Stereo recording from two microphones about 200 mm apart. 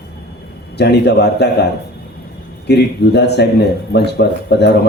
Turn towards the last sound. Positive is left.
turn(degrees=55)  # may be behind; listen again after turning